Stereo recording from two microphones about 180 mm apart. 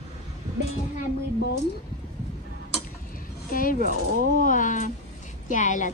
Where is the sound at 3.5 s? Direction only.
50° left (ahead or behind).